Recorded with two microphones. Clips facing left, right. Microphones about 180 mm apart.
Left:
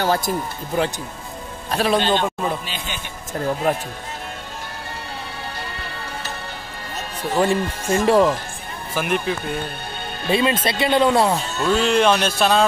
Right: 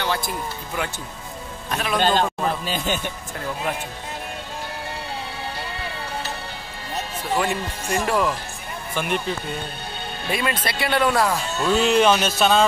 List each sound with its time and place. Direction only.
0.0 s music: 40° left (ahead or behind)
1.7 s speech: 35° left (ahead or behind)
2.0 s a man's voice: 45° right (ahead or behind)
7.3 s speech: 30° left (ahead or behind)
8.9 s speech: 5° left (ahead or behind)
10.3 s speech: 25° left (ahead or behind)
11.6 s speech: 5° right (ahead or behind)